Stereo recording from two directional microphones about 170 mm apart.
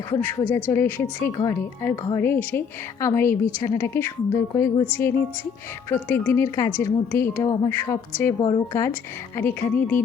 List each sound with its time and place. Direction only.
0.1 s a woman's voice: 10° left (ahead or behind)
8.4 s a woman's voice: 25° left (ahead or behind)